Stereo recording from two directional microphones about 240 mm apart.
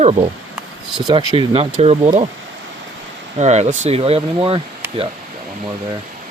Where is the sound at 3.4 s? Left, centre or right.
Right.